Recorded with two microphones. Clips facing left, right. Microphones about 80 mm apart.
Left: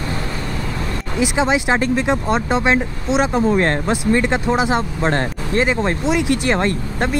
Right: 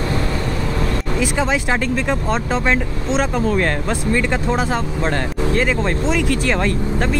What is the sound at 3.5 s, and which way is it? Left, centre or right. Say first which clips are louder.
Speech: left 2 dB; left.